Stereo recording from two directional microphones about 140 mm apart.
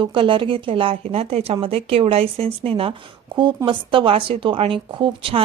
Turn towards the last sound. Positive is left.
turn(degrees=-35)  # may be behind; listen again after turning